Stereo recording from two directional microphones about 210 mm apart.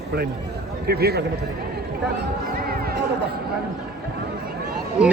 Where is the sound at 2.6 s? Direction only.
45° right (ahead or behind).